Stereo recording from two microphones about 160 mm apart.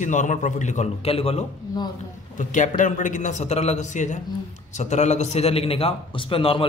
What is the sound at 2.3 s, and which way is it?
A man's voice, 55° left (ahead or behind).